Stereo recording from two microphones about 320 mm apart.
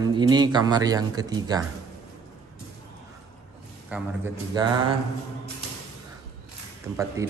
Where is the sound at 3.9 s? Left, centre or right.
Centre.